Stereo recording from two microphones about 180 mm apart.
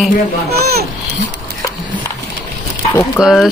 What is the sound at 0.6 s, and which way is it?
Speech, 60° right (ahead or behind).